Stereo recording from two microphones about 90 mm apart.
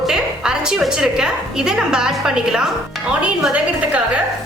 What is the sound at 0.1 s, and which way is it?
A woman's voice, 10° right (ahead or behind).